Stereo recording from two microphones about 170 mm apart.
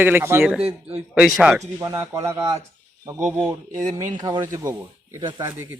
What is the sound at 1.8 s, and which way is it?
Speech, 15° right (ahead or behind).